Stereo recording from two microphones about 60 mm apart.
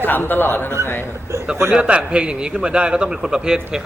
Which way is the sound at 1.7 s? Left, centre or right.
Centre.